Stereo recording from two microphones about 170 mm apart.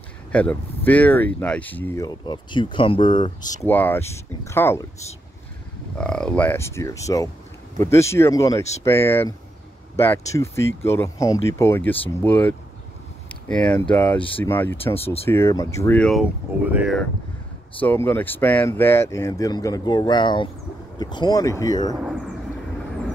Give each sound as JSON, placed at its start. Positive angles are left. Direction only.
{"t": 0.3, "sound": "speech", "side_deg": 10}
{"t": 2.0, "sound": "speech", "side_deg": 25}
{"t": 3.6, "sound": "speech", "side_deg": 10}
{"t": 5.9, "sound": "speech", "side_deg": 5}
{"t": 14.1, "sound": "speech", "side_deg": 30}
{"t": 14.4, "sound": "speech", "side_deg": 15}
{"t": 15.0, "sound": "speech", "side_deg": 35}
{"t": 15.2, "sound": "speech", "side_deg": 15}
{"t": 16.0, "sound": "speech", "side_deg": 0}
{"t": 17.7, "sound": "speech", "side_deg": 10}